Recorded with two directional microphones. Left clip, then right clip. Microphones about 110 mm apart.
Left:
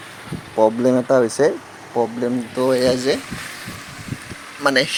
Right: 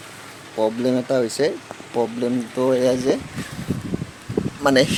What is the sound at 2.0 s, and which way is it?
Speech, 5° right (ahead or behind).